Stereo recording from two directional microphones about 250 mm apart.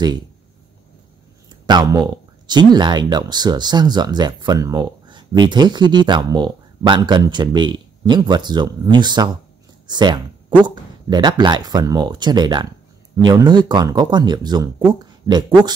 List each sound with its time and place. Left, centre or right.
1.5 s speech: centre